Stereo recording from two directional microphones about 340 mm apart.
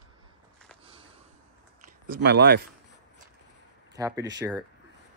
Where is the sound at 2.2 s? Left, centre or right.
Right.